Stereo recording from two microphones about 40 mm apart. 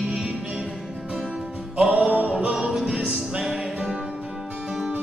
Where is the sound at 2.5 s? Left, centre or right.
Right.